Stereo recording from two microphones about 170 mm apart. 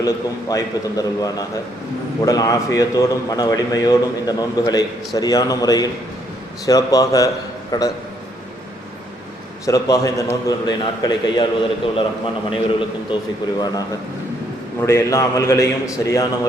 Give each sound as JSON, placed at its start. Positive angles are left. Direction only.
{"t": 0.0, "sound": "a man's voice", "side_deg": 20}
{"t": 9.6, "sound": "a man's voice", "side_deg": 20}